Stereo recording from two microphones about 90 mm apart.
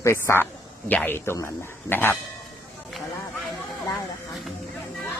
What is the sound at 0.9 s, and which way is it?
A man's voice, 20° left (ahead or behind).